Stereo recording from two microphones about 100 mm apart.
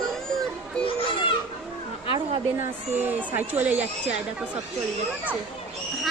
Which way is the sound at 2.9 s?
20° right (ahead or behind).